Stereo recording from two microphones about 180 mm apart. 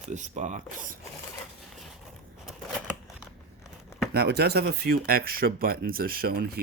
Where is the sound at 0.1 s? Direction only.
45° right (ahead or behind).